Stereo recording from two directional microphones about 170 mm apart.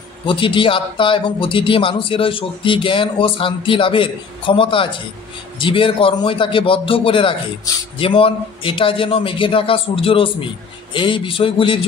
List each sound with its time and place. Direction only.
0.3 s a man's voice: 30° left (ahead or behind)